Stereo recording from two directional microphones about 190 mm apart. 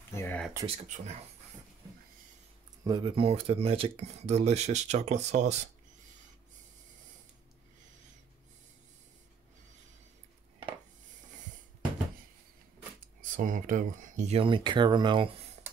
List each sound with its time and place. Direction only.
0.1 s speech: 10° left (ahead or behind)
0.7 s speech: 35° right (ahead or behind)
2.8 s speech: 20° right (ahead or behind); by 5.7 s 35° right (ahead or behind)
13.2 s speech: 45° right (ahead or behind); by 15.2 s 25° right (ahead or behind)